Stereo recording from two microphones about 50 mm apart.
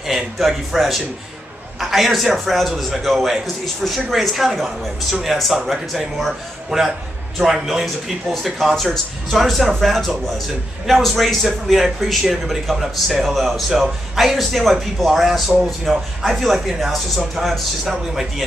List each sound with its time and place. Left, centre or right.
0.0 s a man's voice: centre